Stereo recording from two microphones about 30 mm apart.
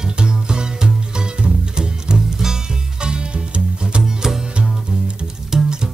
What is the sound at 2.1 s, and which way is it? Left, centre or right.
Music, centre.